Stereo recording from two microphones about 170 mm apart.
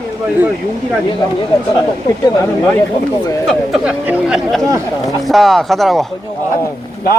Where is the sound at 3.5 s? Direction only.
5° right (ahead or behind).